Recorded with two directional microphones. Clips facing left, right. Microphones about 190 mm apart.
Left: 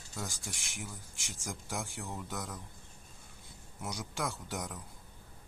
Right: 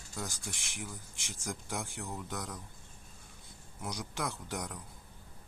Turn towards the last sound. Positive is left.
turn(degrees=0)  # may be behind; listen again after turning